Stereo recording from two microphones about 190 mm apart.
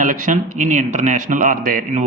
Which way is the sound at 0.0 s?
45° right (ahead or behind).